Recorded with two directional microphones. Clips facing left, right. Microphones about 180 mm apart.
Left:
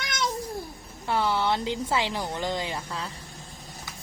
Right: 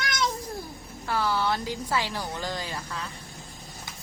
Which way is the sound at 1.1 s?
20° left (ahead or behind).